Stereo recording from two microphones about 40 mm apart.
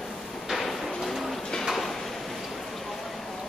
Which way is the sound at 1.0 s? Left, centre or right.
Centre.